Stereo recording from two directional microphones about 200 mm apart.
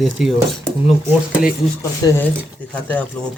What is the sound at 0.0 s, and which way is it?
Speech, centre (ahead or behind).